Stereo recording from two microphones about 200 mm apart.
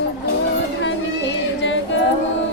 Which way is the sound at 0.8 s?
65° left (ahead or behind).